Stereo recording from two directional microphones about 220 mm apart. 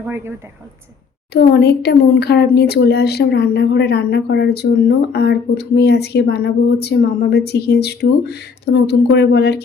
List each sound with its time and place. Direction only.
1.3 s speech: 45° left (ahead or behind)